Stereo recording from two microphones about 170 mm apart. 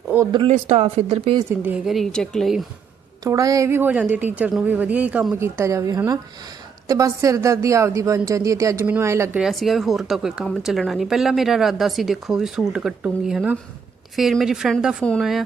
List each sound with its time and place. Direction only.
0.3 s speech: 30° right (ahead or behind)
0.5 s speech: 40° right (ahead or behind)
1.5 s speech: 10° right (ahead or behind)
3.2 s a woman's voice: 20° right (ahead or behind)
9.4 s speech: centre (ahead or behind)